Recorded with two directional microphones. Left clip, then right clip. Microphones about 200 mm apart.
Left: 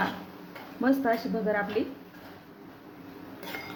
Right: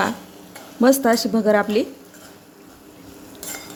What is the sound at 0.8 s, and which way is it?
Speech, 65° right (ahead or behind).